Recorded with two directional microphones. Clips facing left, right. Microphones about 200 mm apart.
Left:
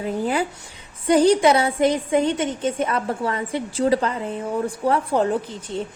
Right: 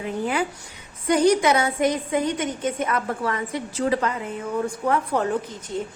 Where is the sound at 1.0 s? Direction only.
30° left (ahead or behind).